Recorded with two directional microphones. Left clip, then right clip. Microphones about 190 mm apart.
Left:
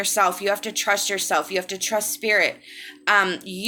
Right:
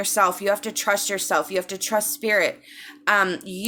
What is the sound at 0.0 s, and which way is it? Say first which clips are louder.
A woman's voice: even; 30° right (ahead or behind).